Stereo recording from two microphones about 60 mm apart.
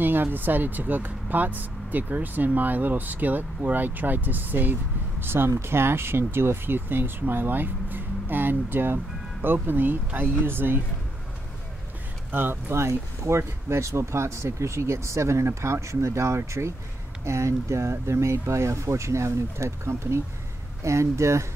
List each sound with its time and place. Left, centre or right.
0.0 s speech: right
12.3 s speech: right
12.7 s speech: right